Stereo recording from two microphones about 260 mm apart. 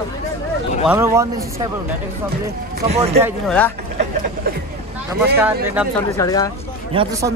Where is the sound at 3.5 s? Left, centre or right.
Centre.